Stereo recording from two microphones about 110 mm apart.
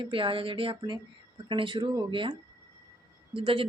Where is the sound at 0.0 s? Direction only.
55° right (ahead or behind).